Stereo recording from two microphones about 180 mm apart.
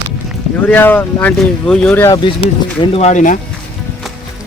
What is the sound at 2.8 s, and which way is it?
Speech, 35° left (ahead or behind).